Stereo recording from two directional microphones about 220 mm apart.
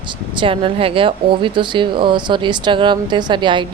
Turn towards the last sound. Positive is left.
turn(degrees=-20)  # may be behind; listen again after turning